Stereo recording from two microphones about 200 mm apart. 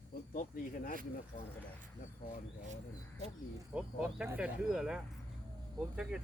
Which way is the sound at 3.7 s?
5° right (ahead or behind).